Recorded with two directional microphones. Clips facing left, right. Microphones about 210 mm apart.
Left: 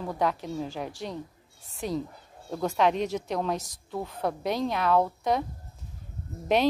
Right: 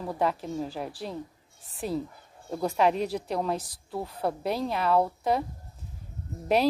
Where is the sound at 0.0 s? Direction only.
5° right (ahead or behind).